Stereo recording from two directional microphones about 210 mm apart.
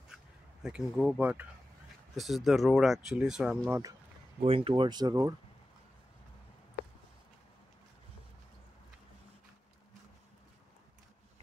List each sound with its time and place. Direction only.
0.6 s speech: 5° right (ahead or behind)
4.4 s speech: 25° right (ahead or behind)